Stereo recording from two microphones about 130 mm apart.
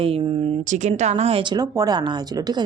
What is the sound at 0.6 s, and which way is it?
Speech, 65° right (ahead or behind).